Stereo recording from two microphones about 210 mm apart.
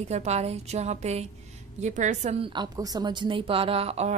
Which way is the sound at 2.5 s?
20° right (ahead or behind).